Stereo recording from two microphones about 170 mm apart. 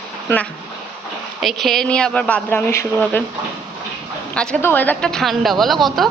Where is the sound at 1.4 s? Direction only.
Centre (ahead or behind).